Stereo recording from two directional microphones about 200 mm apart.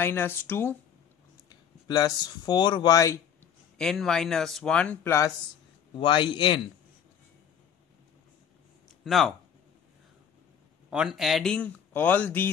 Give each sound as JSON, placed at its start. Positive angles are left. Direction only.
{"t": 0.0, "sound": "speech", "side_deg": 10}
{"t": 3.7, "sound": "speech", "side_deg": 0}
{"t": 5.9, "sound": "a man's voice", "side_deg": 25}
{"t": 9.0, "sound": "speech", "side_deg": 0}
{"t": 10.9, "sound": "speech", "side_deg": -5}